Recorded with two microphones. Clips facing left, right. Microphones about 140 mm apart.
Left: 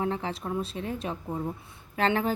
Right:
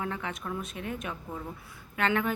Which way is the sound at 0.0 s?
30° left (ahead or behind).